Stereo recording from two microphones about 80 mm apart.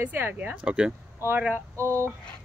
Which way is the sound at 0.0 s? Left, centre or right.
Right.